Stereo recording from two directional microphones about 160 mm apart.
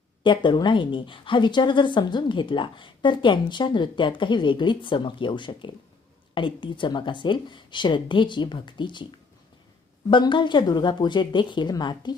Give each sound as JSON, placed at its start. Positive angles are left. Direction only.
{"t": 0.2, "sound": "speech", "side_deg": 30}
{"t": 10.1, "sound": "speech", "side_deg": 30}